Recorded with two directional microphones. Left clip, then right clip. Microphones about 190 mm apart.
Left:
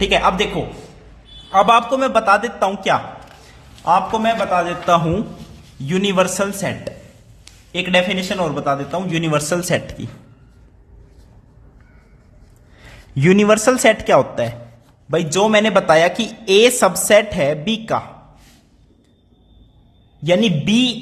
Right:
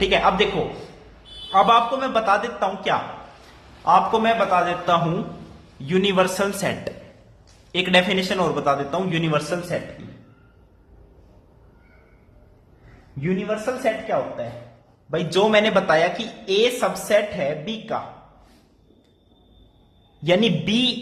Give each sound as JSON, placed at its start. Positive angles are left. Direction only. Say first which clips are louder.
{"t": 0.0, "sound": "speech", "louder": "left 3 dB", "side_deg": 30}
{"t": 1.5, "sound": "a man's voice", "louder": "left 3 dB", "side_deg": 30}
{"t": 13.1, "sound": "a man's voice", "louder": "left 12 dB", "side_deg": 50}
{"t": 15.1, "sound": "speech", "louder": "left 3 dB", "side_deg": 35}
{"t": 20.2, "sound": "a man's voice", "louder": "left 3 dB", "side_deg": 25}